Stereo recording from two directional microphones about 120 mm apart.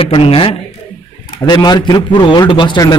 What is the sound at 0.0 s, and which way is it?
Speech, 50° left (ahead or behind).